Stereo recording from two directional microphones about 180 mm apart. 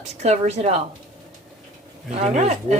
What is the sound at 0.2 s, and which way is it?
Speech, 40° right (ahead or behind).